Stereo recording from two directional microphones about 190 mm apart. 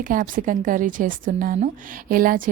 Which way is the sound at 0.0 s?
45° right (ahead or behind).